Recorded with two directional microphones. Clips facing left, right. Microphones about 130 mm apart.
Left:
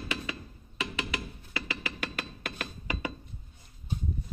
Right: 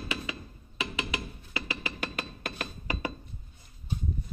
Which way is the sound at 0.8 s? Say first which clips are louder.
Even; 15° right (ahead or behind).